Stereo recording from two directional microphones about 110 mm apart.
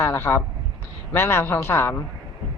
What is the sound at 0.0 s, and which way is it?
Speech, 20° left (ahead or behind).